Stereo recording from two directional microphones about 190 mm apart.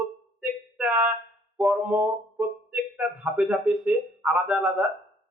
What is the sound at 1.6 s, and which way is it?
Speech, 5° right (ahead or behind).